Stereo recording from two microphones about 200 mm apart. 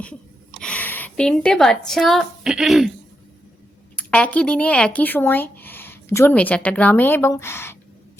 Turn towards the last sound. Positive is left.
turn(degrees=10)  # may be behind; listen again after turning